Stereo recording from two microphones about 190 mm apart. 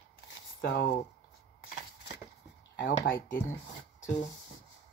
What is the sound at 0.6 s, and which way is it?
Speech, 60° left (ahead or behind).